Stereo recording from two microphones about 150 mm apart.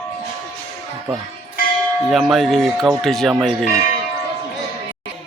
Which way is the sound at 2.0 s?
Centre (ahead or behind).